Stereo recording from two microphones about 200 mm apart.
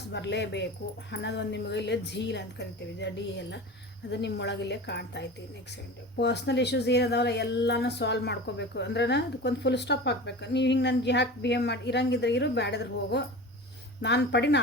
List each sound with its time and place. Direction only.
0.1 s speech: 60° left (ahead or behind)